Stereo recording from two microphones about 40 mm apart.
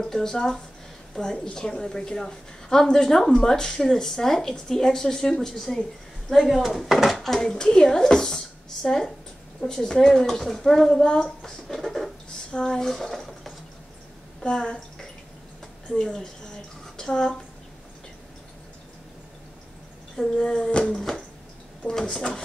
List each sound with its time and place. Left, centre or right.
0.0 s a woman's voice: centre
12.4 s speech: centre
14.4 s a woman's voice: left
20.2 s a woman's voice: centre
21.9 s a woman's voice: centre